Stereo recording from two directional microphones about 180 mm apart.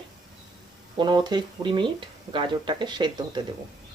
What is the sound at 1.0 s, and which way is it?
Speech, 25° right (ahead or behind).